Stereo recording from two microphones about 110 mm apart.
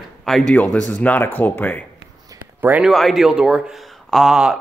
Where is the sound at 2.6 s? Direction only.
15° right (ahead or behind).